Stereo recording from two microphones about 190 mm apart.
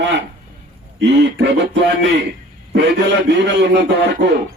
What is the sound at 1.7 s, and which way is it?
A man's voice, 65° right (ahead or behind).